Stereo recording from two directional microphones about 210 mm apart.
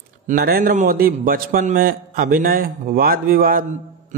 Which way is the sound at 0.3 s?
45° right (ahead or behind).